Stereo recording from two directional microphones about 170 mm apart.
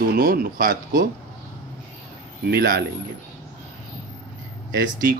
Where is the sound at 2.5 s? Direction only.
70° right (ahead or behind).